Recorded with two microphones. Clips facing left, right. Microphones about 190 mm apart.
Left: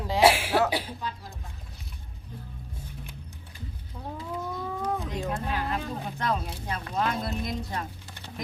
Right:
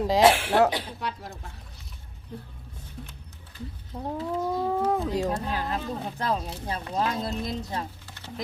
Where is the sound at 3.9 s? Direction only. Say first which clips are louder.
Right 6 dB; 40° right (ahead or behind).